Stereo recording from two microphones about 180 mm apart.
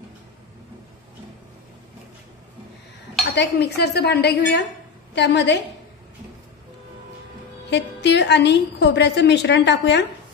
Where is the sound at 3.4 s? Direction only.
70° left (ahead or behind).